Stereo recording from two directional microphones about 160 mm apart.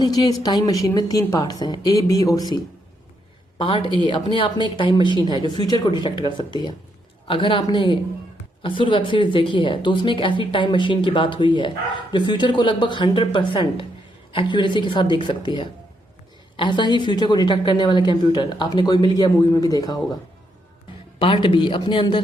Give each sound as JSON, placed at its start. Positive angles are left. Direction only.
{"t": 0.0, "sound": "a woman's voice", "side_deg": 25}
{"t": 3.6, "sound": "a woman's voice", "side_deg": 30}
{"t": 21.2, "sound": "a woman's voice", "side_deg": 35}